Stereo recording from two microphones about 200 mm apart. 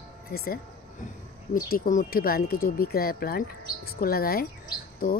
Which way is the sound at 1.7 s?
45° left (ahead or behind).